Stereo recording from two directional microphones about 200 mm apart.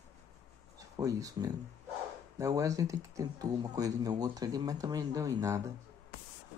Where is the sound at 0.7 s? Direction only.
15° right (ahead or behind).